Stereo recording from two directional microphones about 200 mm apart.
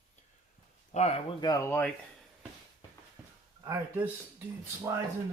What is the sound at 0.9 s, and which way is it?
Speech, 35° left (ahead or behind).